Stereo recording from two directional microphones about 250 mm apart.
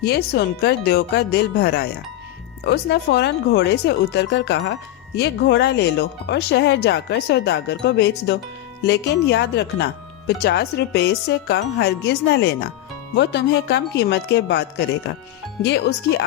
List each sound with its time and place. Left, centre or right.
0.0 s speech: left